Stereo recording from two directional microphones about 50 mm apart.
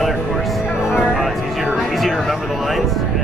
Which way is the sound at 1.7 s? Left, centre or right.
Centre.